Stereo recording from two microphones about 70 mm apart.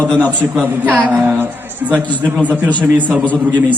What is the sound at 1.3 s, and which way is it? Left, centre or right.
Speech, right.